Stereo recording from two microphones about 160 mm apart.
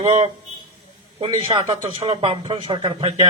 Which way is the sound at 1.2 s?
30° right (ahead or behind).